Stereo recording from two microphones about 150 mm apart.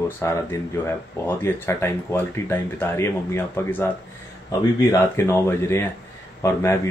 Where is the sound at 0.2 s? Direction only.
15° left (ahead or behind).